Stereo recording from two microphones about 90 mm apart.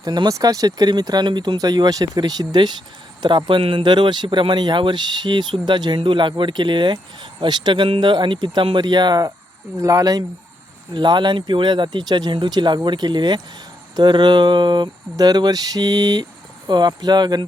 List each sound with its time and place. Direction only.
0.0 s speech: 45° right (ahead or behind)
9.7 s speech: 40° right (ahead or behind)
10.9 s speech: 55° right (ahead or behind)